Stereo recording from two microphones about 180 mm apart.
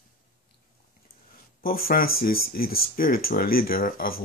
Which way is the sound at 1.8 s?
55° left (ahead or behind).